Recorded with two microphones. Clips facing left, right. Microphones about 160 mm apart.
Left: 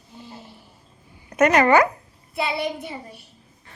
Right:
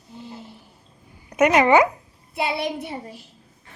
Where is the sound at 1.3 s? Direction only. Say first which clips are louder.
Even; 10° right (ahead or behind).